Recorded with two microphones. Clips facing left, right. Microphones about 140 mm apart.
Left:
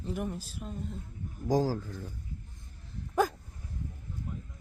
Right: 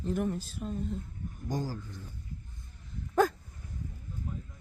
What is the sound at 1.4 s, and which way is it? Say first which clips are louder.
Speech: left 8 dB; 90° left.